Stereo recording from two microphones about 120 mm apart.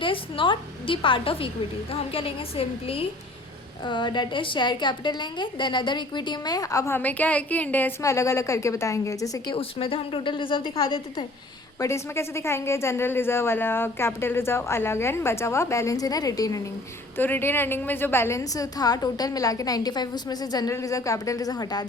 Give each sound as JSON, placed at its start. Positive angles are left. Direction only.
{"t": 0.0, "sound": "a woman's voice", "side_deg": 45}
{"t": 3.8, "sound": "a woman's voice", "side_deg": 40}
{"t": 8.0, "sound": "speech", "side_deg": 25}
{"t": 9.6, "sound": "a woman's voice", "side_deg": 50}
{"t": 11.8, "sound": "speech", "side_deg": 25}
{"t": 17.2, "sound": "speech", "side_deg": 15}